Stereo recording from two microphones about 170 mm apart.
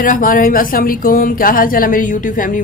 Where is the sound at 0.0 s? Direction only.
55° left (ahead or behind).